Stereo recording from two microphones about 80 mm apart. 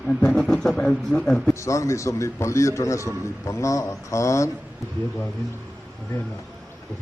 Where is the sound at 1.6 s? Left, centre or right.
Left.